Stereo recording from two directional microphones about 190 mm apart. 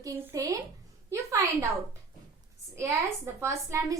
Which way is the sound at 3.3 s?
15° right (ahead or behind).